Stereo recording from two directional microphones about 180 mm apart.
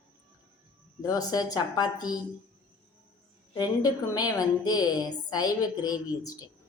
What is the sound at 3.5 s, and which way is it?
A woman's voice, 20° left (ahead or behind).